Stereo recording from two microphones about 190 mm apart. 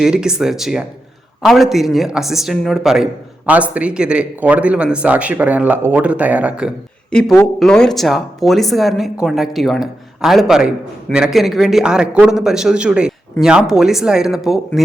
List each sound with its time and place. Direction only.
0.0 s a man's voice: 5° right (ahead or behind)
7.1 s a man's voice: 5° left (ahead or behind)